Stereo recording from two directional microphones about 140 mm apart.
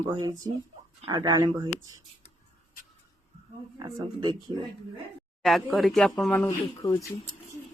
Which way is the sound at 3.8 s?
30° right (ahead or behind).